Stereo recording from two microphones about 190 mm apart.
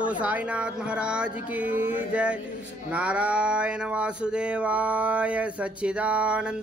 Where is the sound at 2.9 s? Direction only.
5° right (ahead or behind).